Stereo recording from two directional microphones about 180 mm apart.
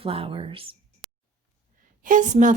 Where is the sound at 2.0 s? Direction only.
45° right (ahead or behind).